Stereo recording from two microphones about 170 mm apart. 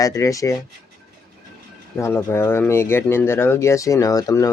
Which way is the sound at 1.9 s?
15° left (ahead or behind).